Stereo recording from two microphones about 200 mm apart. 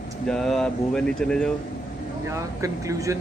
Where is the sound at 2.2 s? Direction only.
15° right (ahead or behind).